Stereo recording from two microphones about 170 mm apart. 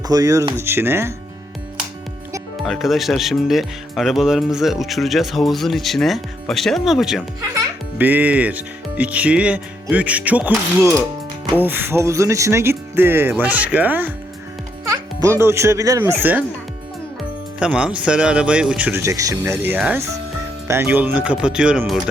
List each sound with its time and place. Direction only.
0.1 s speech: 20° right (ahead or behind)
2.6 s a child's voice: centre (ahead or behind)
17.6 s speech: 5° right (ahead or behind)